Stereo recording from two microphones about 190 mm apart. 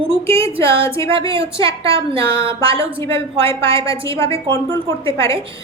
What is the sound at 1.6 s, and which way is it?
Speech, 15° left (ahead or behind).